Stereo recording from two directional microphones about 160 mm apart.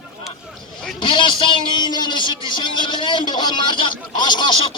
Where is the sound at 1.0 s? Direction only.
30° left (ahead or behind).